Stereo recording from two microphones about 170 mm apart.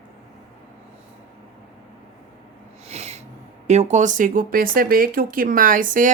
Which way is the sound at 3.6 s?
40° right (ahead or behind).